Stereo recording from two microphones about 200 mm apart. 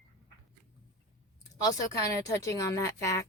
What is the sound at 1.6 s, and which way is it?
Speech, 15° left (ahead or behind).